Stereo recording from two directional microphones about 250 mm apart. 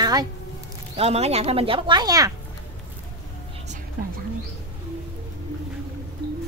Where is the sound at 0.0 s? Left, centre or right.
Centre.